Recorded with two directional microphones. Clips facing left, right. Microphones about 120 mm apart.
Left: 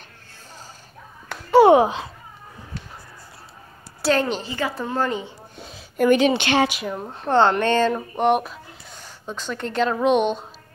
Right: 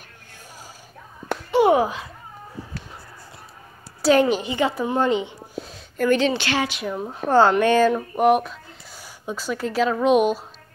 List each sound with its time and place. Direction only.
1.7 s speech: 25° left (ahead or behind)
4.1 s a woman's voice: 15° right (ahead or behind)
5.6 s a sound: centre (ahead or behind)
5.9 s speech: 15° left (ahead or behind)
6.7 s speech: centre (ahead or behind)